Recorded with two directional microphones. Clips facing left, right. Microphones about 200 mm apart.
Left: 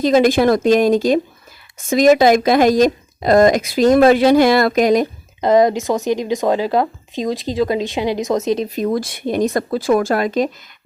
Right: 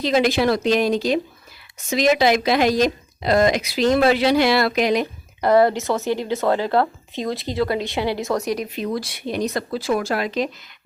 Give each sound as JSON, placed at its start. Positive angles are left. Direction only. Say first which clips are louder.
{"t": 0.0, "sound": "speech", "louder": "left 5 dB", "side_deg": 45}
{"t": 5.4, "sound": "a woman's voice", "louder": "left 3 dB", "side_deg": 20}
{"t": 8.6, "sound": "speech", "louder": "left 6 dB", "side_deg": 45}